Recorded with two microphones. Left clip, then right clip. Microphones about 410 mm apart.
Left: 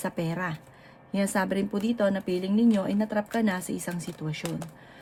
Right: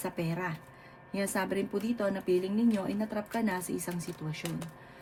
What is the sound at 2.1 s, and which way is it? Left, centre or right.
Speech, left.